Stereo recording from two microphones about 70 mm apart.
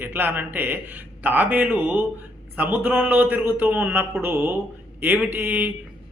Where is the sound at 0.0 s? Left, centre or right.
Right.